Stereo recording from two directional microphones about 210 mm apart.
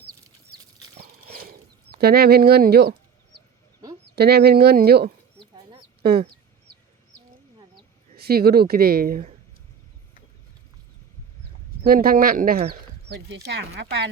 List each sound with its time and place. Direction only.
0.9 s a sound: 45° right (ahead or behind)
4.1 s a woman's voice: 50° right (ahead or behind)
8.1 s a woman's voice: 50° right (ahead or behind)
11.9 s speech: 40° right (ahead or behind)
13.1 s speech: 55° right (ahead or behind)